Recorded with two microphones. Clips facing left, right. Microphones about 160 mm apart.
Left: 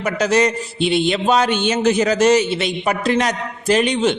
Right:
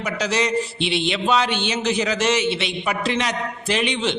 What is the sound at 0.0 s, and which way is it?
A man's voice, 50° left (ahead or behind).